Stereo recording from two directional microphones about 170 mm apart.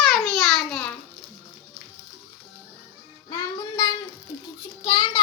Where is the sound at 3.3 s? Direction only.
20° left (ahead or behind).